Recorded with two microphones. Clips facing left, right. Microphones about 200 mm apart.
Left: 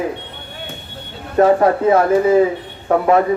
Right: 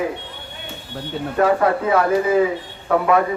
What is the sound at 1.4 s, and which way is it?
Speech, 30° left (ahead or behind).